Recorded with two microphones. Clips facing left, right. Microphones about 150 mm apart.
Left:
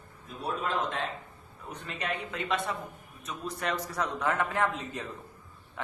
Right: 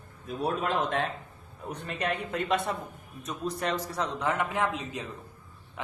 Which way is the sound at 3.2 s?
35° right (ahead or behind).